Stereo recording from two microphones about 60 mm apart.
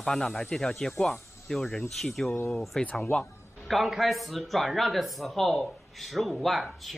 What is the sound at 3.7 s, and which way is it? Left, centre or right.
Speech, centre.